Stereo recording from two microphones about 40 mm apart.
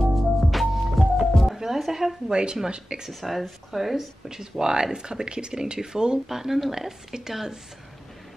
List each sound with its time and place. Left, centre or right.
0.5 s music: centre
2.3 s speech: centre
3.1 s speech: centre
4.3 s speech: centre